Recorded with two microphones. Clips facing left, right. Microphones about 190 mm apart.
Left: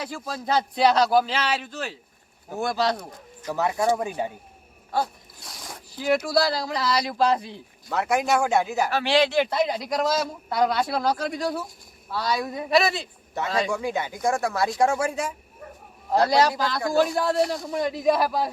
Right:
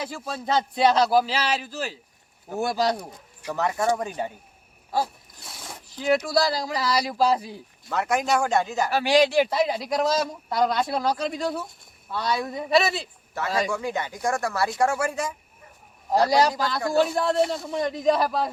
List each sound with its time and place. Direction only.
0.0 s a man's voice: 5° right (ahead or behind)
3.5 s speech: 10° left (ahead or behind)
4.9 s speech: 5° right (ahead or behind)
7.9 s speech: 10° left (ahead or behind)
8.9 s a man's voice: 10° right (ahead or behind)
10.1 s a man's voice: 5° left (ahead or behind); by 13.7 s 10° right (ahead or behind)
13.7 s speech: 15° left (ahead or behind)
16.3 s a man's voice: 10° right (ahead or behind); by 18.5 s 5° left (ahead or behind)